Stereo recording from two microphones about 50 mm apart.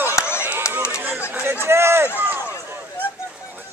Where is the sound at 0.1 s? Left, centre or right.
Left.